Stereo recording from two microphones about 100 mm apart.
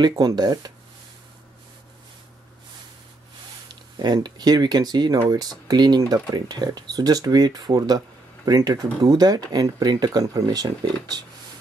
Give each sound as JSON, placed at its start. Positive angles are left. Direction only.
{"t": 0.0, "sound": "speech", "side_deg": -40}
{"t": 4.0, "sound": "speech", "side_deg": -45}